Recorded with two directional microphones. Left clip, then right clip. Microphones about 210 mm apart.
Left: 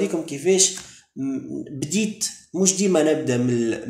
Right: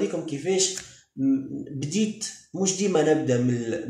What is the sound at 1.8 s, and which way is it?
Speech, 45° left (ahead or behind).